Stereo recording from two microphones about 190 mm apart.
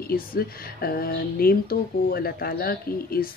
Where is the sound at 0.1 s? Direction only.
50° left (ahead or behind).